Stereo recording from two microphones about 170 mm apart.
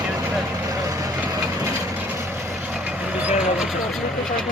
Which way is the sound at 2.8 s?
10° right (ahead or behind).